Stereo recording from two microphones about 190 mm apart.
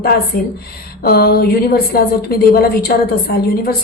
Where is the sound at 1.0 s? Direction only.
55° left (ahead or behind).